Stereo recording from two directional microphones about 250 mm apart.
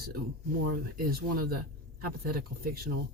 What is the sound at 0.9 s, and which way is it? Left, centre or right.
Speech, right.